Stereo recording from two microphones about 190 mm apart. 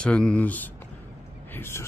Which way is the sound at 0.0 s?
5° left (ahead or behind).